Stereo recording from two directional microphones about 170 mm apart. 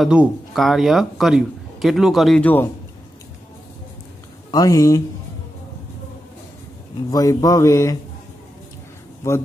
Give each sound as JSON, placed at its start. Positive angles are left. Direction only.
{"t": 0.0, "sound": "speech", "side_deg": -5}
{"t": 4.5, "sound": "speech", "side_deg": 20}
{"t": 7.1, "sound": "speech", "side_deg": 20}